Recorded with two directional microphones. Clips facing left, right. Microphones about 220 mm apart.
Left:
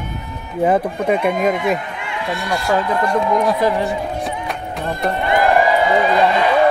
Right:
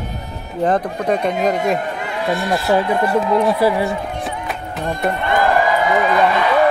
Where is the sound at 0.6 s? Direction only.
10° left (ahead or behind); by 3.9 s 10° right (ahead or behind).